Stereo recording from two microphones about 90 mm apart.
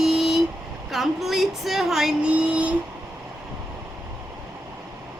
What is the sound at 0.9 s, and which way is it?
Speech, centre (ahead or behind).